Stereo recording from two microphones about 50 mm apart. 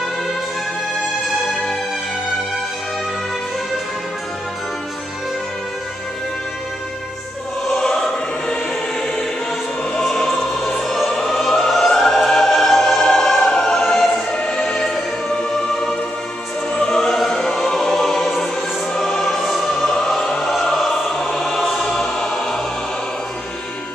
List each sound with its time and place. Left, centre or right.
7.6 s choir: centre
9.9 s choir: centre
10.2 s music: centre
14.3 s music: centre
16.7 s music: centre
20.5 s choir: centre
21.9 s choir: centre